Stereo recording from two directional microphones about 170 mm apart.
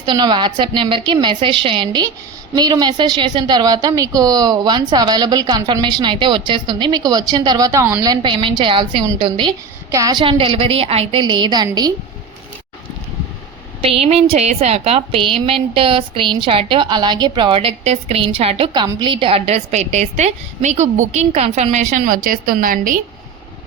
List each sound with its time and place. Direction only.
0.0 s a woman's voice: 25° right (ahead or behind)
9.9 s a woman's voice: 20° right (ahead or behind)
13.8 s a woman's voice: 35° right (ahead or behind); by 23.0 s 55° right (ahead or behind)